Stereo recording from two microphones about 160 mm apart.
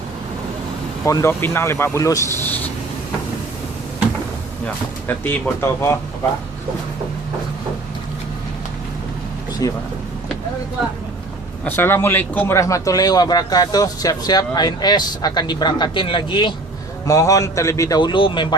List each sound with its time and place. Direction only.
1.0 s speech: 20° left (ahead or behind)
4.6 s speech: 10° left (ahead or behind)
9.6 s a man's voice: 25° left (ahead or behind)
11.6 s a man's voice: 15° left (ahead or behind); by 16.6 s 30° left (ahead or behind)
17.1 s a man's voice: 20° left (ahead or behind)